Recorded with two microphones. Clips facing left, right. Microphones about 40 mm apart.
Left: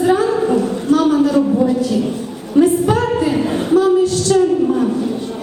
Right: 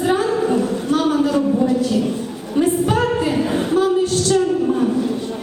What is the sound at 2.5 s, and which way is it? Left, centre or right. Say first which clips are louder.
A woman's voice: left 4 dB; centre.